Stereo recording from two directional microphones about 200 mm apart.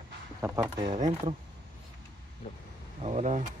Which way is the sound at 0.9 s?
35° right (ahead or behind).